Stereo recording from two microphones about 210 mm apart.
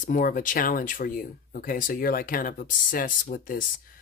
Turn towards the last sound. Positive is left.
turn(degrees=40)  # may be behind; listen again after turning